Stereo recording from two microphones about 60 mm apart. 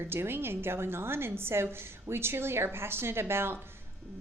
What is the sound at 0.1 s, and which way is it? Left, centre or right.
A woman's voice, right.